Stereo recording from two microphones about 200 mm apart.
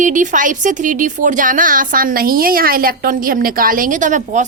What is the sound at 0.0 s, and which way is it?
A woman's voice, 40° right (ahead or behind).